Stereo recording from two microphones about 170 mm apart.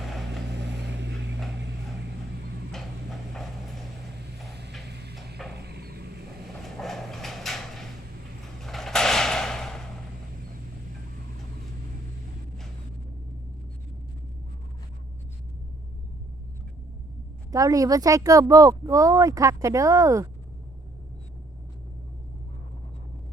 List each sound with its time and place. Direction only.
0.0 s vehicle: centre (ahead or behind)
0.5 s vehicle: 90° right
2.7 s clip-clop: centre (ahead or behind)
4.9 s a sound: 80° right
6.5 s a sound: centre (ahead or behind)
8.6 s sliding door: centre (ahead or behind)
17.5 s speech: 20° right (ahead or behind)